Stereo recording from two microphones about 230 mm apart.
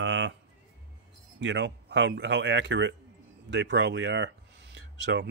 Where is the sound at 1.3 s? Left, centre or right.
Right.